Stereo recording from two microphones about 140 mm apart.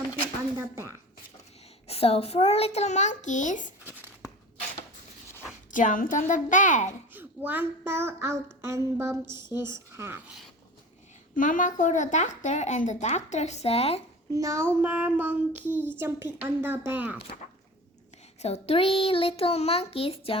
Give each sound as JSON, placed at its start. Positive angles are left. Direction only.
{"t": 1.9, "sound": "a child's voice", "side_deg": 45}
{"t": 5.7, "sound": "a woman's voice", "side_deg": 70}
{"t": 7.1, "sound": "a child's voice", "side_deg": -15}
{"t": 9.6, "sound": "child singing", "side_deg": -15}
{"t": 11.3, "sound": "speech", "side_deg": 70}
{"t": 14.3, "sound": "child singing", "side_deg": -20}
{"t": 18.3, "sound": "a child's voice", "side_deg": 50}